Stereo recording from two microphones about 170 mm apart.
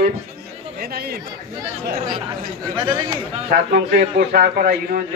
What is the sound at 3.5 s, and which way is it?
A man's voice, 60° right (ahead or behind).